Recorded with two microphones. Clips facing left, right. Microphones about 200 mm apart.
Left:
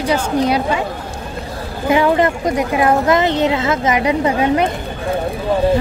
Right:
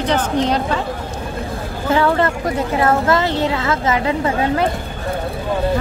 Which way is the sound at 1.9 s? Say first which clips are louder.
Left 2 dB; 15° left (ahead or behind).